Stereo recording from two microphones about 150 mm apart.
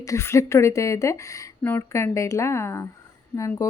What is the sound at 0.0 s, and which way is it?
Speech, 20° left (ahead or behind).